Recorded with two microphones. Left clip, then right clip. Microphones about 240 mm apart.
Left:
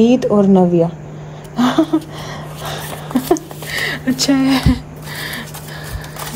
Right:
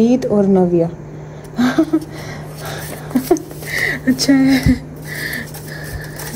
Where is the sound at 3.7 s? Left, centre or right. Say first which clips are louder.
Right 2 dB; centre.